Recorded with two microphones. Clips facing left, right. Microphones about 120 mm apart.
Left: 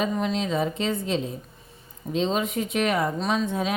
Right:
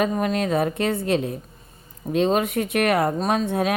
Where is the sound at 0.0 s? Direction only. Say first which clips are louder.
Right 3 dB; 55° right (ahead or behind).